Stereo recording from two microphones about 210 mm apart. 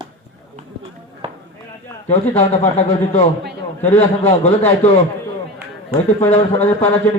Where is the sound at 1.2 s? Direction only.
30° right (ahead or behind).